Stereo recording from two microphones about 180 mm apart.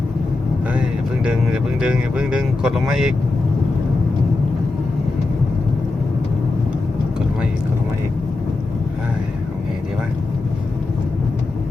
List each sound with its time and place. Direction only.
0.7 s vehicle: 5° right (ahead or behind)
1.8 s speech: 5° right (ahead or behind)